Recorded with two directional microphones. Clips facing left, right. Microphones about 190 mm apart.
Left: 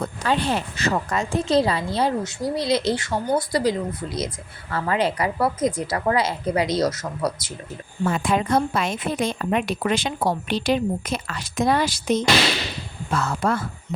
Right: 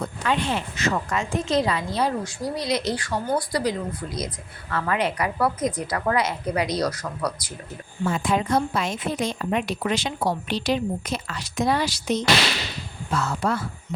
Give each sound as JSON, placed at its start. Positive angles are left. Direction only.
{"t": 0.0, "sound": "a woman's voice", "side_deg": 35}
{"t": 8.0, "sound": "a woman's voice", "side_deg": 60}